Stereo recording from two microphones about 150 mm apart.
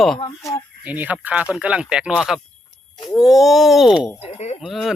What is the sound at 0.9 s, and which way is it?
Speech, 10° right (ahead or behind).